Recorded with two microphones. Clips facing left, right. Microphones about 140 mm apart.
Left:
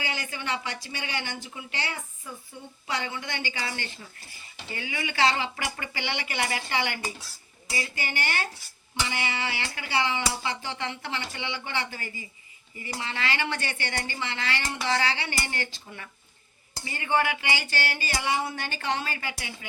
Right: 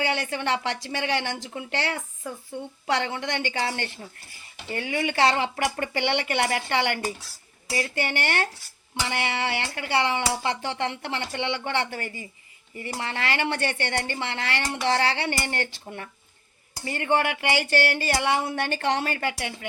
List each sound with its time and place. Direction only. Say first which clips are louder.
0.0 s speech: right 7 dB; 60° right (ahead or behind)